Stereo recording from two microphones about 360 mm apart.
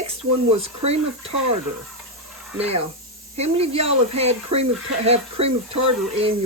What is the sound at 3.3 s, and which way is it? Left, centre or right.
Speech, centre.